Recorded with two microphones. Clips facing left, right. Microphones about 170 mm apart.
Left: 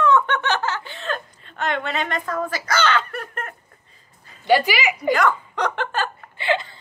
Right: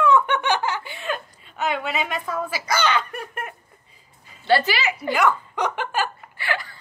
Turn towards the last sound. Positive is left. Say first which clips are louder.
# left 6 dB
turn(degrees=20)  # may be behind; listen again after turning